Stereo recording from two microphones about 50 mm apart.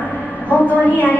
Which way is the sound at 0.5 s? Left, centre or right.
Left.